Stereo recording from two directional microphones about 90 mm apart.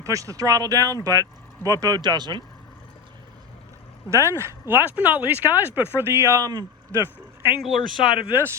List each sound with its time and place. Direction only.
0.0 s speech: 35° right (ahead or behind)
4.1 s speech: 30° right (ahead or behind)
6.9 s vehicle: 25° right (ahead or behind)
7.9 s speech: 10° right (ahead or behind)
8.3 s speech: 25° right (ahead or behind)